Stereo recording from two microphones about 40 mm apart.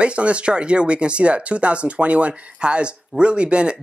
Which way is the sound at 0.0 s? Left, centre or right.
Right.